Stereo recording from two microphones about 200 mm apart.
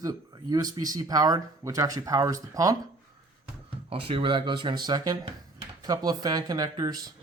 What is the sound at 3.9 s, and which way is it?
Speech, 25° right (ahead or behind).